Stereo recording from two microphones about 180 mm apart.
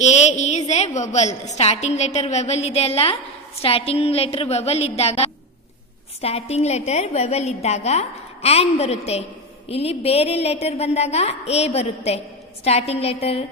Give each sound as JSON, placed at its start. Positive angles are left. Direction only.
{"t": 0.0, "sound": "a woman's voice", "side_deg": 40}